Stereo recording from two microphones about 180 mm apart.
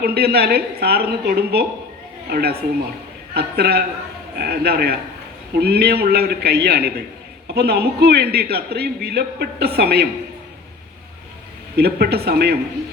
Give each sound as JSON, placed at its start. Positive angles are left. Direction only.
{"t": 0.0, "sound": "a man's voice", "side_deg": -60}
{"t": 11.8, "sound": "a man's voice", "side_deg": -65}